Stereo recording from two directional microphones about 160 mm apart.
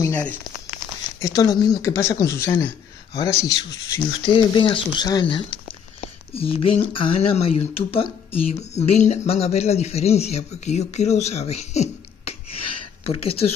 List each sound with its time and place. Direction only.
0.0 s speech: 10° left (ahead or behind)
1.2 s speech: 25° left (ahead or behind)
4.2 s speech: 30° left (ahead or behind)